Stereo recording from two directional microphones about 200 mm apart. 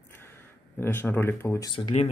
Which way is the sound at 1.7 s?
30° left (ahead or behind).